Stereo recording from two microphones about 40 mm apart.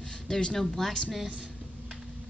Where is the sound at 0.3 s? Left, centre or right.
Centre.